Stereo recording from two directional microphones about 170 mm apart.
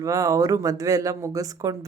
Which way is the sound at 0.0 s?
20° right (ahead or behind).